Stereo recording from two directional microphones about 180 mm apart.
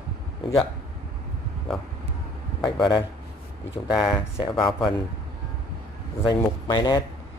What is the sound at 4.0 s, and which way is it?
Speech, 20° left (ahead or behind).